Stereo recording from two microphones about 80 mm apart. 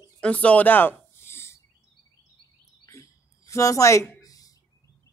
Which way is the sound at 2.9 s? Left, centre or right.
Left.